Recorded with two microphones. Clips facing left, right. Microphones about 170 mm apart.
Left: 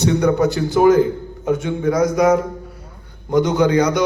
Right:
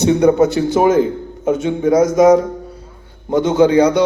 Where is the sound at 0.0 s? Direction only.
20° right (ahead or behind).